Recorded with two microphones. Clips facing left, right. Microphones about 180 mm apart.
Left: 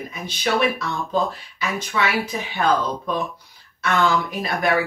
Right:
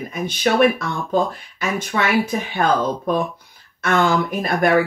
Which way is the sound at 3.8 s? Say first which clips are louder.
Right 3 dB; 50° right (ahead or behind).